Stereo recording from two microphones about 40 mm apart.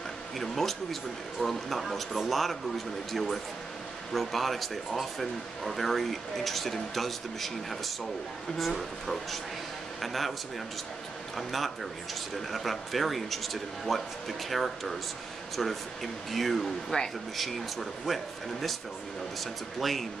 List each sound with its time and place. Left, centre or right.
0.4 s a man's voice: centre
11.3 s speech: centre
16.9 s speech: left
17.4 s speech: centre